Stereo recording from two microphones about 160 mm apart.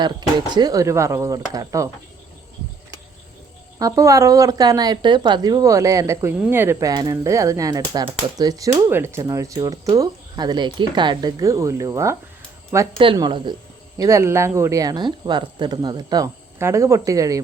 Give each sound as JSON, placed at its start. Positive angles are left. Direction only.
{"t": 0.0, "sound": "speech", "side_deg": -25}
{"t": 3.8, "sound": "speech", "side_deg": -20}
{"t": 13.1, "sound": "speech", "side_deg": -30}
{"t": 14.0, "sound": "speech", "side_deg": -20}